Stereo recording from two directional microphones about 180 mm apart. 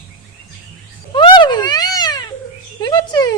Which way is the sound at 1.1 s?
25° left (ahead or behind).